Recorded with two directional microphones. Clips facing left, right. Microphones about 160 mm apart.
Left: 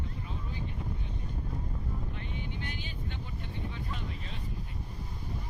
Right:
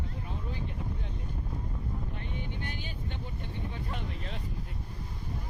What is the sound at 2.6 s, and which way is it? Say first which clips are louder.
Speech: right 1 dB; 50° right (ahead or behind).